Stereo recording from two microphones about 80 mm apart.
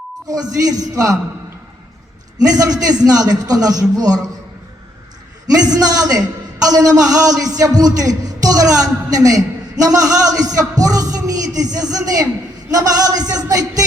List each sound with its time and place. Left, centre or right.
0.3 s a man's voice: right
2.5 s a man's voice: right
5.5 s a man's voice: right